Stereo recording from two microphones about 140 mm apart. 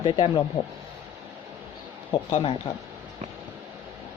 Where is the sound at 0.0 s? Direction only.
35° left (ahead or behind).